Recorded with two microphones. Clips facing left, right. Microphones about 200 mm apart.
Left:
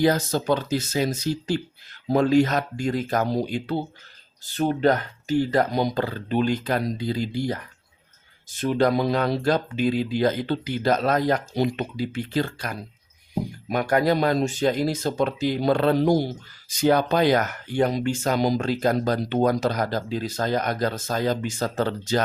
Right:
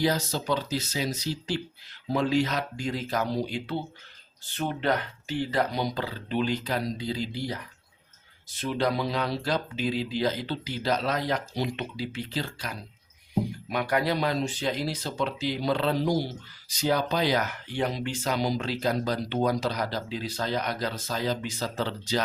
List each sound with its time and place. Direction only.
0.0 s speech: 50° left (ahead or behind)